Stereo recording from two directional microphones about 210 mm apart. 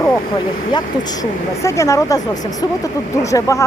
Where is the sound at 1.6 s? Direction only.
15° left (ahead or behind).